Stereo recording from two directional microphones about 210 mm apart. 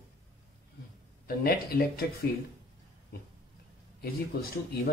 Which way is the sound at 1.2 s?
45° left (ahead or behind).